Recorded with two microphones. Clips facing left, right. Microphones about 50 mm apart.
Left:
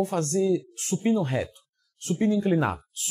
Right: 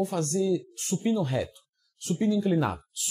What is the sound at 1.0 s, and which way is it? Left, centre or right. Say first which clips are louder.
Speech: left 2 dB; left.